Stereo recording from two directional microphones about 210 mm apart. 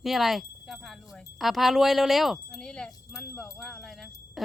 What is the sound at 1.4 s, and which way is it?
Speech, centre (ahead or behind).